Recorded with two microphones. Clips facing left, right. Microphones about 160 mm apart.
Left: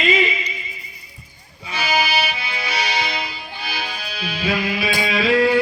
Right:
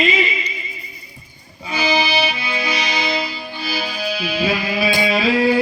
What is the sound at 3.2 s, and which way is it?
Music, 35° right (ahead or behind).